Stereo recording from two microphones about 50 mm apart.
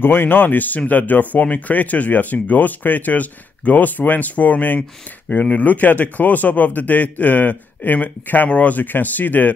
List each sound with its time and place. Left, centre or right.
0.0 s speech: left